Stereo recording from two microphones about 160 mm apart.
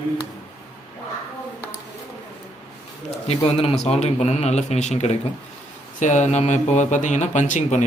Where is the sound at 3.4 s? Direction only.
40° left (ahead or behind).